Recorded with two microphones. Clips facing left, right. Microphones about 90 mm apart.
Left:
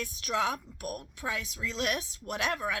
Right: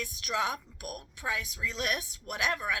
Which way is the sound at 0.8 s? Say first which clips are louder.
Left 3 dB; 30° left (ahead or behind).